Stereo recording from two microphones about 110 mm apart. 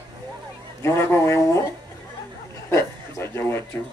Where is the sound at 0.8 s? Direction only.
25° left (ahead or behind).